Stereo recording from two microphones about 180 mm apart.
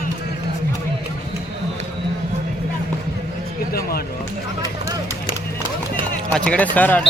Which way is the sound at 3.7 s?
60° left (ahead or behind).